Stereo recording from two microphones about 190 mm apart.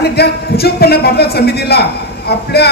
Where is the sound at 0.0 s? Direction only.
55° left (ahead or behind).